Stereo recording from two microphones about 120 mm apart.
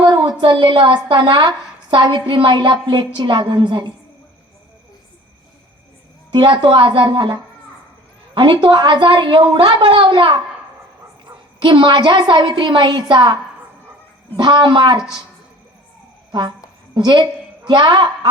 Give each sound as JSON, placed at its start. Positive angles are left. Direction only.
{"t": 0.0, "sound": "a woman's voice", "side_deg": -40}
{"t": 6.3, "sound": "a woman's voice", "side_deg": -40}
{"t": 8.4, "sound": "a woman's voice", "side_deg": -40}
{"t": 16.3, "sound": "a woman's voice", "side_deg": -40}